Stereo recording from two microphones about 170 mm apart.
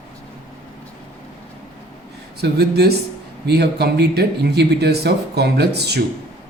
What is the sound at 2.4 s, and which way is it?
Speech, 70° right (ahead or behind).